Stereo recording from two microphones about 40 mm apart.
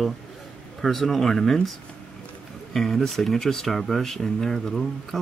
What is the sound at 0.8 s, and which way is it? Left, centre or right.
Speech, centre.